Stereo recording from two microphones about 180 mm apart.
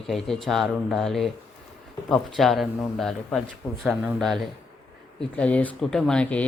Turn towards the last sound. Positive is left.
turn(degrees=5)  # may be behind; listen again after turning